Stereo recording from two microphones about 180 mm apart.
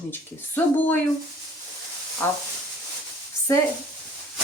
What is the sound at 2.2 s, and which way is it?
Speech, 10° left (ahead or behind).